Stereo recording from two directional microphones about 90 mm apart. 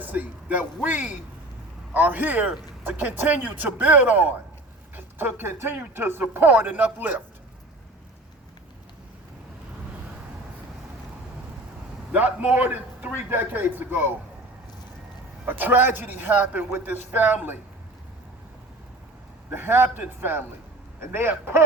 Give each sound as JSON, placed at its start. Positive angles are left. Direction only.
{"t": 0.0, "sound": "a man's voice", "side_deg": -20}
{"t": 12.1, "sound": "a man's voice", "side_deg": -20}
{"t": 15.4, "sound": "a man's voice", "side_deg": -20}
{"t": 19.5, "sound": "a man's voice", "side_deg": -25}